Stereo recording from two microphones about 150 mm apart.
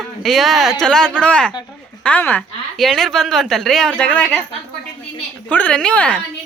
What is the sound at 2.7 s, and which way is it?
Speech, centre (ahead or behind).